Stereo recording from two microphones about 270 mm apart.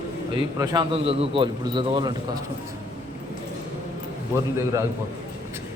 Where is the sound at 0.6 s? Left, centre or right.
Centre.